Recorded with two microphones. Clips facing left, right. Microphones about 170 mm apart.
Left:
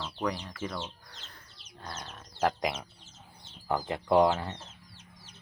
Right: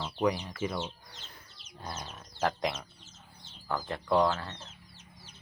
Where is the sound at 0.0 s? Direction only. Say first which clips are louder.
Right 4 dB; 10° right (ahead or behind).